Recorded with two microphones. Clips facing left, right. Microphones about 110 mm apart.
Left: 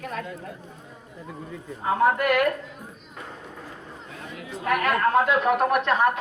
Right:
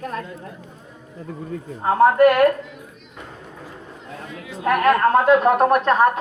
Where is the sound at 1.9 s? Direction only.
45° right (ahead or behind).